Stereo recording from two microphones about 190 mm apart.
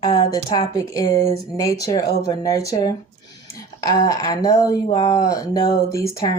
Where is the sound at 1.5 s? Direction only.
20° left (ahead or behind).